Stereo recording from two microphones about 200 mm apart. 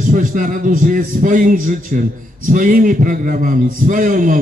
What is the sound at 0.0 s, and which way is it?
A man's voice, 45° right (ahead or behind).